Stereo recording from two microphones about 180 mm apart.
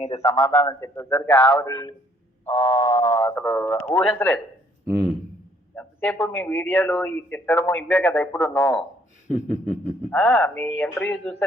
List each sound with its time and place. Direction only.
0.0 s a man's voice: 35° left (ahead or behind)
0.3 s speech: 15° left (ahead or behind)
1.7 s a man's voice: 25° left (ahead or behind)
5.7 s a sound: 10° left (ahead or behind)
6.1 s speech: 15° left (ahead or behind)
9.3 s a sound: 40° left (ahead or behind)
10.1 s speech: 10° left (ahead or behind)